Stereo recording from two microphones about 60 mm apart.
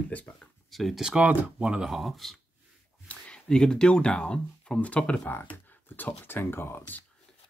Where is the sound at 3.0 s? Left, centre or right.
Centre.